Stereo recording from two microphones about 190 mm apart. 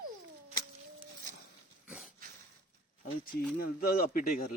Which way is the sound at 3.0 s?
50° left (ahead or behind).